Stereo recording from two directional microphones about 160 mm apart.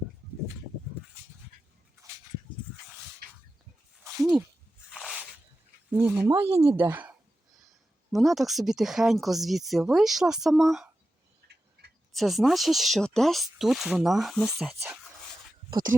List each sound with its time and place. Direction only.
4.9 s a sound: centre (ahead or behind)
5.9 s speech: 10° right (ahead or behind)
6.5 s speech: 40° right (ahead or behind)
6.7 s speech: 10° right (ahead or behind)
12.1 s speech: centre (ahead or behind)